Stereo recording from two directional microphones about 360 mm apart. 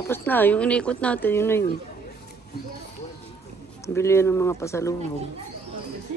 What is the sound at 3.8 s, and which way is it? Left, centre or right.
Speech, centre.